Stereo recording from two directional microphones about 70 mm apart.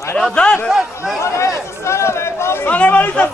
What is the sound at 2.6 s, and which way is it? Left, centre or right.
Speech, left.